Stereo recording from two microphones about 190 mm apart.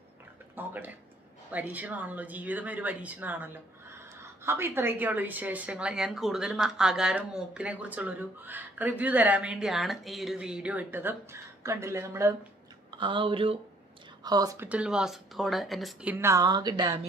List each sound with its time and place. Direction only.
0.6 s speech: 10° right (ahead or behind)
12.9 s speech: 25° right (ahead or behind)
14.7 s speech: 5° right (ahead or behind); by 16.7 s 20° right (ahead or behind)